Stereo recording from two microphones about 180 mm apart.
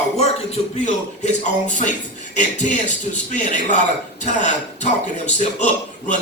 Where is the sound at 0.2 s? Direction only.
35° left (ahead or behind).